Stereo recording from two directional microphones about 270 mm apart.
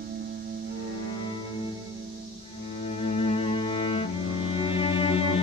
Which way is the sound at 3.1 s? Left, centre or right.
Left.